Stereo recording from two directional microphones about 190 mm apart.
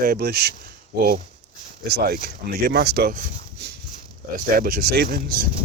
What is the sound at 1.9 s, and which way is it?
Speech, 55° right (ahead or behind).